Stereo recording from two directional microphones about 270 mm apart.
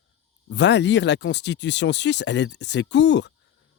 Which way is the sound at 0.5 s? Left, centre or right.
Left.